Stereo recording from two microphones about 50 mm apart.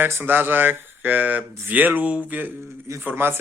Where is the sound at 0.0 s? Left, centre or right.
Right.